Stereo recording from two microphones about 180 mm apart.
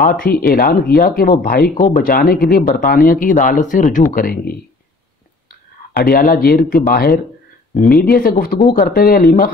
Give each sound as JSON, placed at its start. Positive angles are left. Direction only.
{"t": 0.0, "sound": "speech", "side_deg": 50}
{"t": 5.9, "sound": "speech", "side_deg": 55}